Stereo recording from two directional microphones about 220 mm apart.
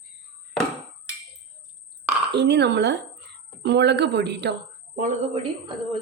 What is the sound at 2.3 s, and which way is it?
Speech, 50° right (ahead or behind).